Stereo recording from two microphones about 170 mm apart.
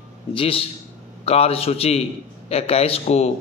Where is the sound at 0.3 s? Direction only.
35° left (ahead or behind).